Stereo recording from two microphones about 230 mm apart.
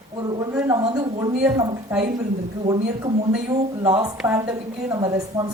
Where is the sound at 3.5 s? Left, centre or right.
Right.